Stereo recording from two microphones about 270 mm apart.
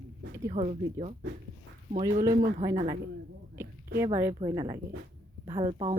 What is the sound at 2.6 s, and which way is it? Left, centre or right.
Speech, centre.